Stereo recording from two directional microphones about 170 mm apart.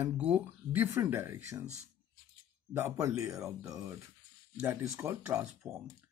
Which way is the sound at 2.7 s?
15° right (ahead or behind).